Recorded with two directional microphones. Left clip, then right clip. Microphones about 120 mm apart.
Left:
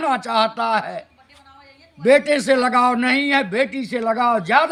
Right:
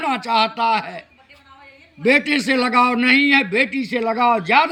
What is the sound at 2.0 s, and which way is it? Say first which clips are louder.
A man's voice: left 2 dB; 45° left (ahead or behind).